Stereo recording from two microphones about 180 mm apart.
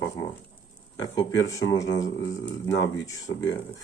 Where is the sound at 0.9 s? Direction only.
20° left (ahead or behind).